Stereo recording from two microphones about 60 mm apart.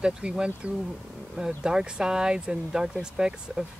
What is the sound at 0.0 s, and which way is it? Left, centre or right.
Speech, centre.